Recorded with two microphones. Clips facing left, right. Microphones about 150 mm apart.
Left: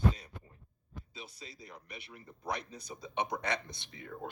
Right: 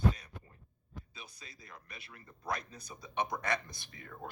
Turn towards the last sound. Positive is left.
turn(degrees=20)  # may be behind; listen again after turning